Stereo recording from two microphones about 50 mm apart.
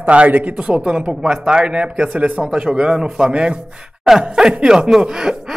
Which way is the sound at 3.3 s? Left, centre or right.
Right.